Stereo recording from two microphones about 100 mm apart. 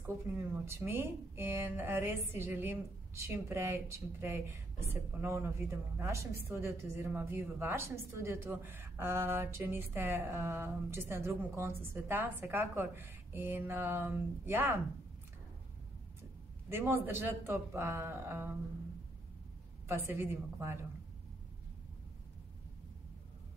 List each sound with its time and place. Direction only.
0.7 s a woman's voice: 25° right (ahead or behind)
16.6 s a woman's voice: 20° right (ahead or behind)
19.9 s a woman's voice: 20° right (ahead or behind)